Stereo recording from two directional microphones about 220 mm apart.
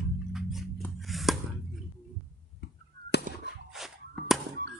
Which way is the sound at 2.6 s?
50° left (ahead or behind).